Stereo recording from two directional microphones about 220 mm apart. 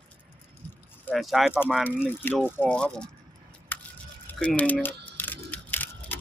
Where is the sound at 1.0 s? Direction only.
Centre (ahead or behind).